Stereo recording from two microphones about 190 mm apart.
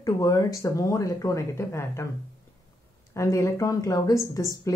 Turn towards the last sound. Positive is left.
turn(degrees=15)  # may be behind; listen again after turning